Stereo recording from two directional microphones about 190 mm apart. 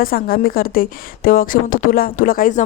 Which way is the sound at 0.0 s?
50° left (ahead or behind).